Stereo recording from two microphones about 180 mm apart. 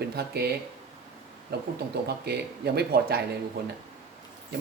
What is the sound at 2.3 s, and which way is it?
Speech, 65° right (ahead or behind).